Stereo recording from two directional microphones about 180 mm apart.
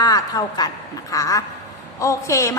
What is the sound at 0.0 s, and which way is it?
A woman's voice, 20° left (ahead or behind).